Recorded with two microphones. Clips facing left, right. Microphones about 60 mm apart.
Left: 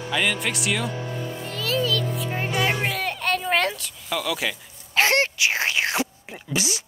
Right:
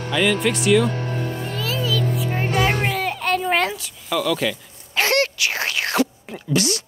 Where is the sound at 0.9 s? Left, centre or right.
Right.